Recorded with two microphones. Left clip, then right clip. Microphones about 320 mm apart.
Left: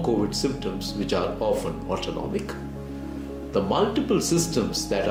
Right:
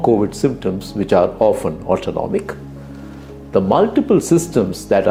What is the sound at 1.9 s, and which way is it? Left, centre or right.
Speech, right.